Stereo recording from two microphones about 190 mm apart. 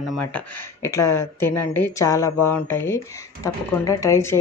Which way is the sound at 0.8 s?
15° left (ahead or behind).